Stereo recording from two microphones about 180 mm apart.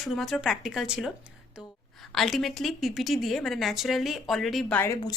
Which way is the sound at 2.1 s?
Centre (ahead or behind).